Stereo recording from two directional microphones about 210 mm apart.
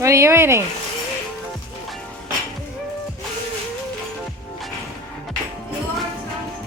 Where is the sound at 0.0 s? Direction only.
15° right (ahead or behind).